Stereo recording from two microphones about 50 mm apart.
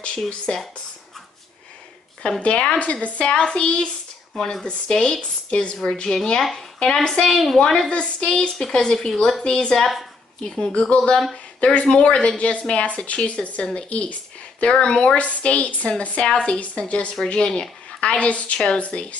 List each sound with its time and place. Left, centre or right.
0.5 s a woman's voice: centre
2.4 s a woman's voice: left
5.5 s a woman's voice: left
8.5 s a woman's voice: centre; by 19.1 s left